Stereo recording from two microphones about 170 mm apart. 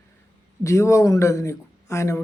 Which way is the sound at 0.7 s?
15° left (ahead or behind).